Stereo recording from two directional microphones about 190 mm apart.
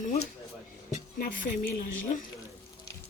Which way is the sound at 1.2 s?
45° left (ahead or behind).